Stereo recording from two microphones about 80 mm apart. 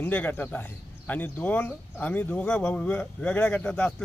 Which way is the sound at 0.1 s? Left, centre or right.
Left.